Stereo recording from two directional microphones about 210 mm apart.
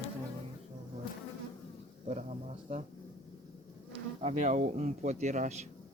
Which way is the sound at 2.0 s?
30° right (ahead or behind).